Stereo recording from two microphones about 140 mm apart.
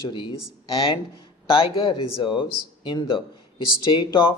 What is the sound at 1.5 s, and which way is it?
Speech, 40° left (ahead or behind).